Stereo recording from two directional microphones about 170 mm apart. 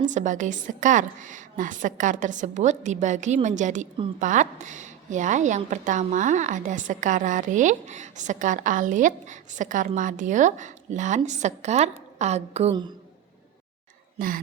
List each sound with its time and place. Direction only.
0.1 s a woman's voice: 45° right (ahead or behind)
14.2 s a woman's voice: 55° right (ahead or behind)